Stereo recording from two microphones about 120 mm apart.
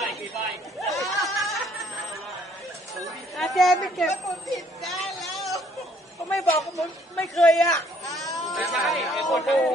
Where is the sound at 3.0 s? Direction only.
Centre (ahead or behind).